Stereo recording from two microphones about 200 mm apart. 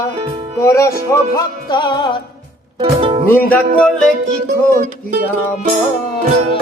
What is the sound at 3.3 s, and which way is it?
Music, 10° left (ahead or behind).